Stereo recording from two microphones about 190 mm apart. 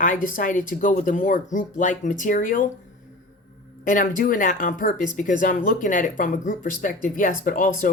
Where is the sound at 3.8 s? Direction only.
45° left (ahead or behind).